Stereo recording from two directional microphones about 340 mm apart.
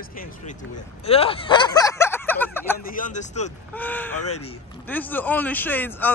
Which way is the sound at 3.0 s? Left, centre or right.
Left.